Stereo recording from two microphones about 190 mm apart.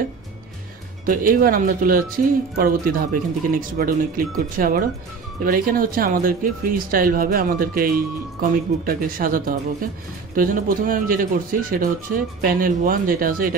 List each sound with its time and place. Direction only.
1.0 s speech: 45° right (ahead or behind)